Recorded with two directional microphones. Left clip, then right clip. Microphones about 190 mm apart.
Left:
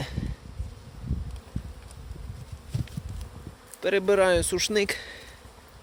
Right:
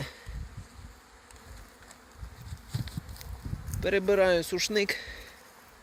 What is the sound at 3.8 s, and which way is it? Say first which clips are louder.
Speech: left 3 dB; 5° left (ahead or behind).